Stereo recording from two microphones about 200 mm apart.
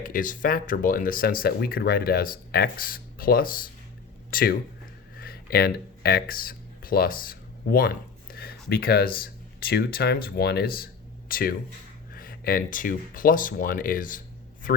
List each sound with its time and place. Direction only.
0.0 s speech: 45° left (ahead or behind)